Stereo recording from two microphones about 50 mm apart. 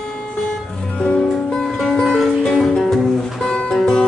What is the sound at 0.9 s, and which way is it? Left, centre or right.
Music, centre.